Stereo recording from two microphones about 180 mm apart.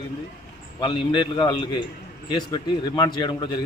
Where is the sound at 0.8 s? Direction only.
25° left (ahead or behind).